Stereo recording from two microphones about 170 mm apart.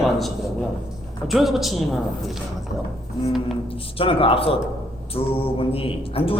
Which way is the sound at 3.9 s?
30° left (ahead or behind).